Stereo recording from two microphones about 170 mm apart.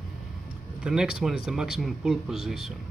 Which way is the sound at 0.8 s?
5° right (ahead or behind).